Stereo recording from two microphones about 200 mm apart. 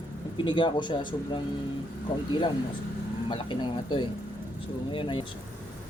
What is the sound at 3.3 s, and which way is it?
Speech, 25° left (ahead or behind).